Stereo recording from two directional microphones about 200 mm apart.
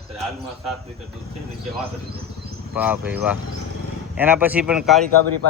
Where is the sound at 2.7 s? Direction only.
10° right (ahead or behind).